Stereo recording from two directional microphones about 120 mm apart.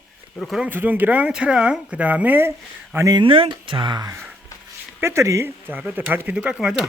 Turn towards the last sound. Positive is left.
turn(degrees=-5)  # may be behind; listen again after turning